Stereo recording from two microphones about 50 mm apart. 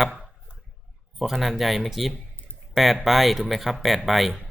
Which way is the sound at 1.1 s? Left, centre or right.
Centre.